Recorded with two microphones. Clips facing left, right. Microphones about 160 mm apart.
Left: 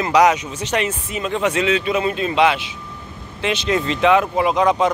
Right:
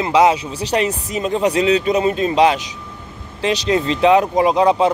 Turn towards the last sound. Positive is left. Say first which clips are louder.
# right 3 dB
turn(degrees=-30)  # may be behind; listen again after turning